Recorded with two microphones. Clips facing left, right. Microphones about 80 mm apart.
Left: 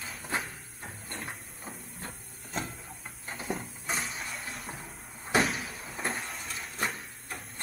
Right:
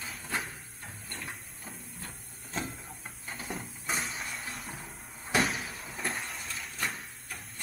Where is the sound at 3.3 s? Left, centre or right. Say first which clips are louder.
Left 4 dB; centre.